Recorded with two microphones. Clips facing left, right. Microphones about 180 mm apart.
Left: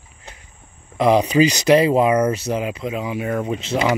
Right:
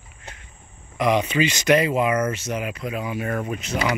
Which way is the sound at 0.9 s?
30° left (ahead or behind).